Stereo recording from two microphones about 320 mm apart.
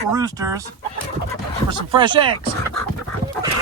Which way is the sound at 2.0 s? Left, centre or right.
Centre.